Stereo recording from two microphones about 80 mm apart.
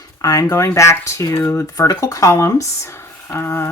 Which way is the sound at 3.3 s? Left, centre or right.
Left.